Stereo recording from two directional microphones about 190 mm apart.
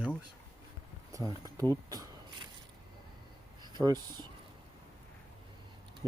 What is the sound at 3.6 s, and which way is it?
Speech, 20° right (ahead or behind).